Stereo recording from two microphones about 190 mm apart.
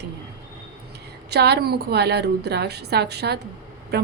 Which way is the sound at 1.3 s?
60° right (ahead or behind).